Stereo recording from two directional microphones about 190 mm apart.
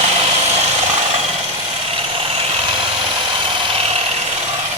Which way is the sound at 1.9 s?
30° right (ahead or behind).